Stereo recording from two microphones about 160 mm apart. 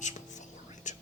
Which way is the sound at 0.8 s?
50° left (ahead or behind).